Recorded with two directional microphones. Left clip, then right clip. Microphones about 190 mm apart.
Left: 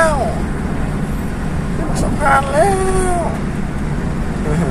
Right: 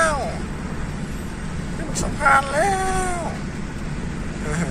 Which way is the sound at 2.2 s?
Centre (ahead or behind).